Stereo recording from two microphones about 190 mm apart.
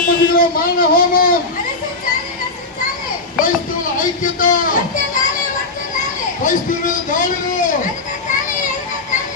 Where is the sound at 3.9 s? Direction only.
45° left (ahead or behind).